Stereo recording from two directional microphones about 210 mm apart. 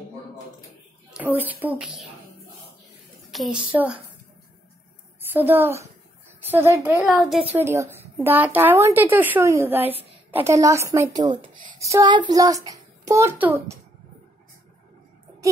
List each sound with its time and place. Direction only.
1.1 s a woman's voice: 10° right (ahead or behind)
3.3 s a child's voice: centre (ahead or behind)
5.3 s a woman's voice: 10° right (ahead or behind)
6.8 s a child's voice: 5° right (ahead or behind)
7.5 s a woman's voice: 15° right (ahead or behind)